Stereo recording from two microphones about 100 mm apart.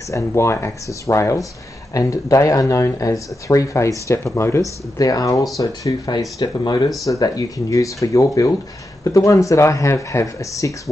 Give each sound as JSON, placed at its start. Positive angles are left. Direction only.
{"t": 0.1, "sound": "speech", "side_deg": 30}